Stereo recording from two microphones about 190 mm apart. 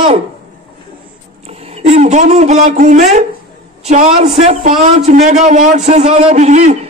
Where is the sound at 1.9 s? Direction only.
35° right (ahead or behind).